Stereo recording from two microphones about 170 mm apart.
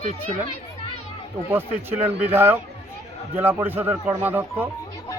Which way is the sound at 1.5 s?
10° right (ahead or behind).